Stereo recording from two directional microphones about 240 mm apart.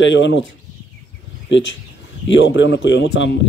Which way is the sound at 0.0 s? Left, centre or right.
Left.